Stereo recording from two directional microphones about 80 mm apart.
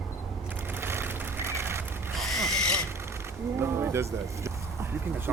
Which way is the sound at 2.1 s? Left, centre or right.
Centre.